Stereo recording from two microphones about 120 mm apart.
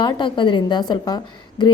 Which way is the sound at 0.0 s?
40° left (ahead or behind).